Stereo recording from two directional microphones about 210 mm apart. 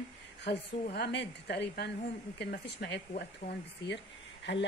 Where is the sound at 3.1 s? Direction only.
40° left (ahead or behind).